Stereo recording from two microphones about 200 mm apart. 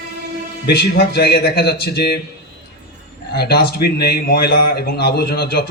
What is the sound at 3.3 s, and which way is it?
A man's voice, 55° left (ahead or behind).